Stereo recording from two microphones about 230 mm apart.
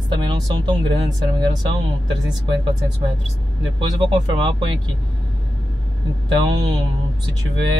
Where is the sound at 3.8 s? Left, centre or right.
Right.